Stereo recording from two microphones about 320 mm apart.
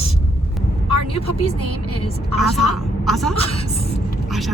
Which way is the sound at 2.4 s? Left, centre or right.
Centre.